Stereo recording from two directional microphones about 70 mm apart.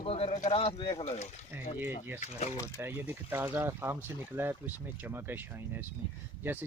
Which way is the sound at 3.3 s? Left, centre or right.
Right.